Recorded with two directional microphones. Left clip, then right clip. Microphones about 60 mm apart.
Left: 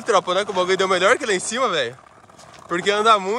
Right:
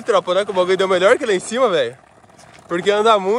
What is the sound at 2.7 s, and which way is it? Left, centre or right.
Speech, left.